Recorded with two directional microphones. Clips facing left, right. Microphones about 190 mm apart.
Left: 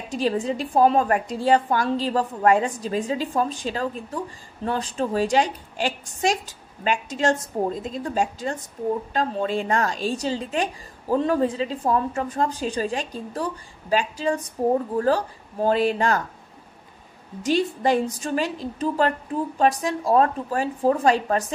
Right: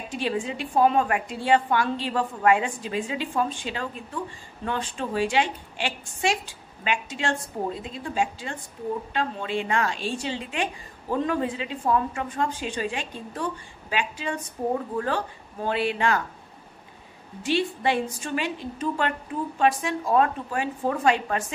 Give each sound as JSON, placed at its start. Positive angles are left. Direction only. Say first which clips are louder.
{"t": 0.1, "sound": "a woman's voice", "louder": "left 5 dB", "side_deg": 40}
{"t": 17.4, "sound": "a woman's voice", "louder": "left 3 dB", "side_deg": 40}